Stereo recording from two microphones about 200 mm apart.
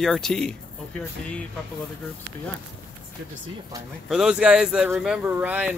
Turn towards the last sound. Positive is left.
turn(degrees=-5)  # may be behind; listen again after turning